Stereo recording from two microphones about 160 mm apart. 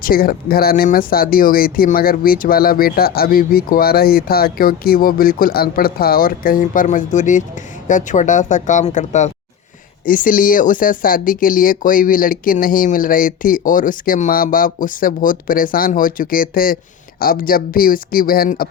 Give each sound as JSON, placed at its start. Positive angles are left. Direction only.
{"t": 0.0, "sound": "speech", "side_deg": 65}